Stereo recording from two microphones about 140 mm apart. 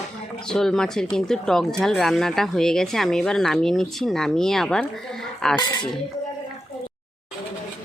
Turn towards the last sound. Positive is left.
turn(degrees=30)  # may be behind; listen again after turning